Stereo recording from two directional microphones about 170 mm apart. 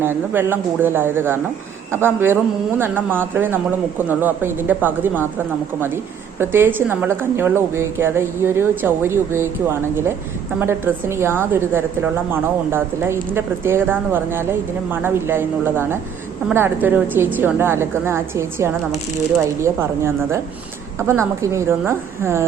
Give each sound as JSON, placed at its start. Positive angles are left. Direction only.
{"t": 0.0, "sound": "a woman's voice", "side_deg": -15}
{"t": 6.4, "sound": "a woman's voice", "side_deg": -10}